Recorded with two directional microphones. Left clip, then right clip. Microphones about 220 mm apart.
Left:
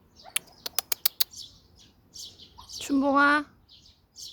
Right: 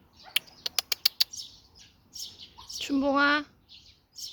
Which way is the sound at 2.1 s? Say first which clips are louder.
Right 2 dB; 35° right (ahead or behind).